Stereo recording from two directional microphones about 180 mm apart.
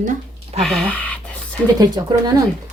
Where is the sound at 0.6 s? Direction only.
5° left (ahead or behind).